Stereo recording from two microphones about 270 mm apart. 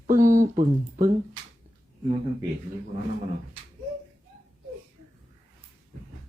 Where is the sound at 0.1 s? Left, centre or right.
Right.